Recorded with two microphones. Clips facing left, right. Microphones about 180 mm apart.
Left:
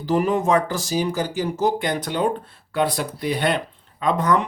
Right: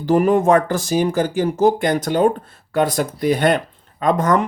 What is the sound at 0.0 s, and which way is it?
Speech, 50° right (ahead or behind).